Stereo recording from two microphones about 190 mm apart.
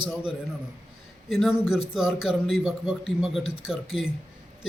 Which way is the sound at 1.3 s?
Centre (ahead or behind).